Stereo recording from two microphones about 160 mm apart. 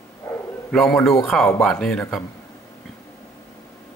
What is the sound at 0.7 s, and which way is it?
Speech, centre (ahead or behind).